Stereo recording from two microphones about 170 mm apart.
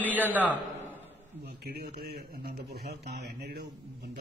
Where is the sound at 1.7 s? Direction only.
65° right (ahead or behind).